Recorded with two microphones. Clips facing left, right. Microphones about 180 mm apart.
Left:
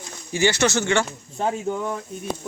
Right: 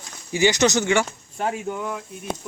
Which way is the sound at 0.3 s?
15° right (ahead or behind).